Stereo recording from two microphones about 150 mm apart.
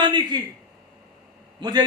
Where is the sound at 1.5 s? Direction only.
25° right (ahead or behind).